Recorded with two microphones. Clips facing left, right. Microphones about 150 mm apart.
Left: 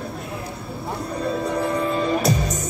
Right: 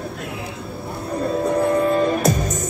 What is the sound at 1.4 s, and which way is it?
Music, 45° right (ahead or behind).